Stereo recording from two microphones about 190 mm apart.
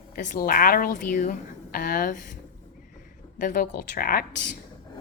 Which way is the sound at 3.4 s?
45° left (ahead or behind).